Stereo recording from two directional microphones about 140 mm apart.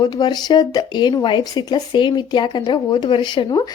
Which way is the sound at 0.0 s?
30° left (ahead or behind).